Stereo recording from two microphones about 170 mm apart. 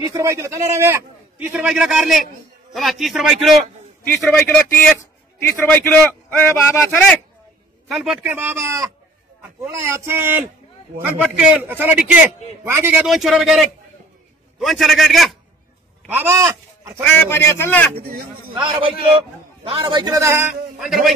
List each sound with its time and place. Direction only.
0.0 s a man's voice: 20° right (ahead or behind); by 3.6 s centre (ahead or behind)
4.0 s a man's voice: 10° left (ahead or behind)
7.9 s a man's voice: centre (ahead or behind)
13.0 s a man's voice: centre (ahead or behind)
16.1 s speech: 15° right (ahead or behind)
17.0 s a man's voice: 10° left (ahead or behind)
17.9 s speech: 60° right (ahead or behind)
18.5 s a man's voice: 30° right (ahead or behind)
20.8 s a man's voice: centre (ahead or behind)